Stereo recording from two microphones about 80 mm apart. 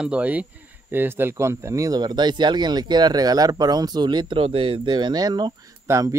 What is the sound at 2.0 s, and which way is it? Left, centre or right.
Speech, right.